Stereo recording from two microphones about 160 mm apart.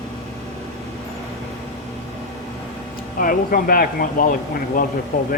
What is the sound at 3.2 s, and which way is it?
Speech, 65° left (ahead or behind).